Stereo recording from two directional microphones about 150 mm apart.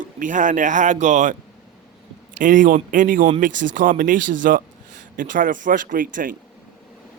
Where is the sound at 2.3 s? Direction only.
60° right (ahead or behind).